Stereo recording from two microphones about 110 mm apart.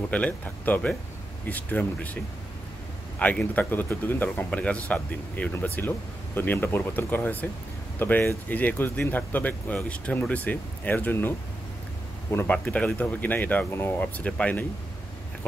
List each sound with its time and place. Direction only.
0.1 s speech: 15° left (ahead or behind)
3.2 s speech: 10° left (ahead or behind)
12.4 s speech: 10° left (ahead or behind)